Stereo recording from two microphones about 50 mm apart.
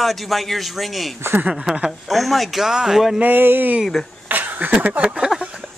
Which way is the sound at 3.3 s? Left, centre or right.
Right.